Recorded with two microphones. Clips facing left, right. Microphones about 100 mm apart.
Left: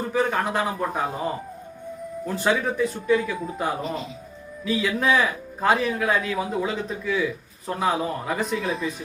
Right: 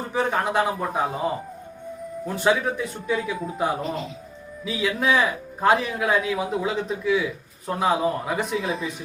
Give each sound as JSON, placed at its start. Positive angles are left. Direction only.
{"t": 0.1, "sound": "speech", "side_deg": -10}
{"t": 2.4, "sound": "a man's voice", "side_deg": -5}